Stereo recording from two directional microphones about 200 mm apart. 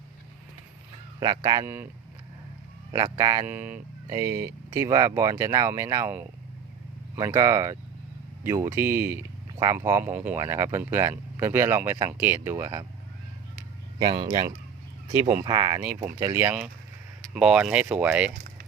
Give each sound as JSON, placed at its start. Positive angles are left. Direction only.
{"t": 1.2, "sound": "speech", "side_deg": -20}
{"t": 2.9, "sound": "speech", "side_deg": -15}
{"t": 14.0, "sound": "speech", "side_deg": -25}
{"t": 18.3, "sound": "a sound", "side_deg": -50}